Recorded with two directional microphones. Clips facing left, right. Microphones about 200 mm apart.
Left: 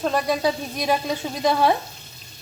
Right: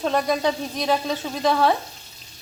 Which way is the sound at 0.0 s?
5° left (ahead or behind).